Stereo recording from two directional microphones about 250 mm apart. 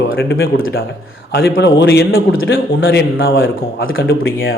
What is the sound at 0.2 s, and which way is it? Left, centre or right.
A man's voice, left.